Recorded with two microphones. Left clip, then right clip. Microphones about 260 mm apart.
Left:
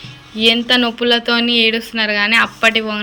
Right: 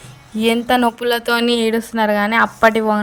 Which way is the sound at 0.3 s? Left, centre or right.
Right.